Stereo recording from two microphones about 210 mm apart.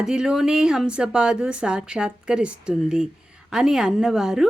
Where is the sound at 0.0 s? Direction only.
5° right (ahead or behind).